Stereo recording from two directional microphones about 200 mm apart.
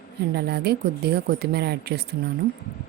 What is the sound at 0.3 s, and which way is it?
Speech, 55° right (ahead or behind).